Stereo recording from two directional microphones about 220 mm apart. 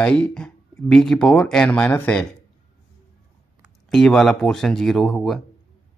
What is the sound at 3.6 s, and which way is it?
Speech, centre (ahead or behind).